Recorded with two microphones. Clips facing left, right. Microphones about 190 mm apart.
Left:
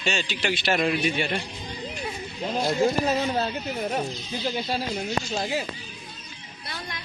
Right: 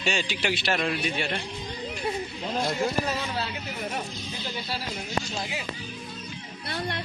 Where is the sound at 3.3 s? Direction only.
45° left (ahead or behind).